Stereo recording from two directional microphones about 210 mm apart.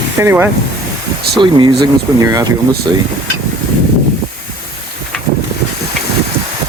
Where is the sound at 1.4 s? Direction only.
20° right (ahead or behind).